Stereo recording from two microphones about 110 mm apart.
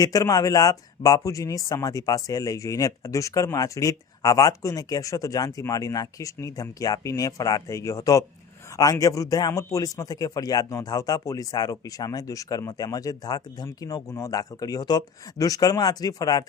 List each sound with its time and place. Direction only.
0.0 s speech: 35° left (ahead or behind)